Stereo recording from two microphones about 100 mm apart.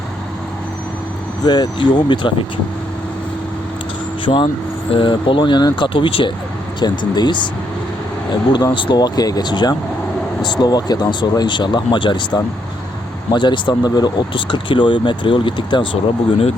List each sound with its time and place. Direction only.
1.5 s speech: 45° left (ahead or behind)
4.3 s speech: 60° left (ahead or behind)
8.7 s speech: 55° left (ahead or behind)